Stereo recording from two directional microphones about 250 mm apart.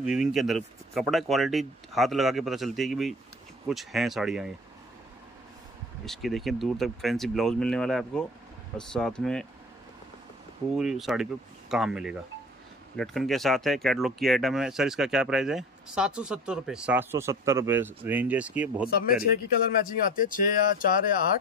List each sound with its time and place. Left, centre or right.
0.0 s speech: centre
6.0 s speech: centre
10.7 s speech: centre
18.9 s speech: left